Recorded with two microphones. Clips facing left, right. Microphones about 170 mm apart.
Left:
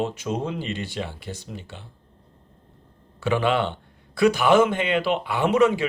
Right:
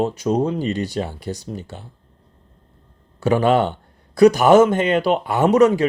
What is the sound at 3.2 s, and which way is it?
Speech, 40° right (ahead or behind).